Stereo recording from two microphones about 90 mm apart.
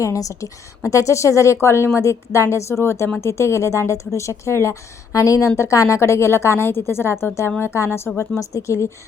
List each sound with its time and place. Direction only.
0.0 s a woman's voice: 40° left (ahead or behind)